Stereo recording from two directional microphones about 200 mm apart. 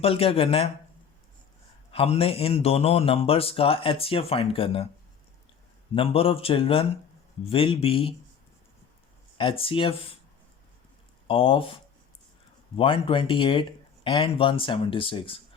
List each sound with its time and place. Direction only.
0.0 s a man's voice: 30° left (ahead or behind)
1.9 s a man's voice: 30° left (ahead or behind)
5.9 s a man's voice: 30° left (ahead or behind)
9.4 s a man's voice: 25° left (ahead or behind)
11.3 s a man's voice: 25° left (ahead or behind)